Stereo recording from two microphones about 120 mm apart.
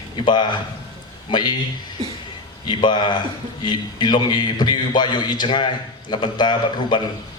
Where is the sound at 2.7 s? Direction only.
40° left (ahead or behind).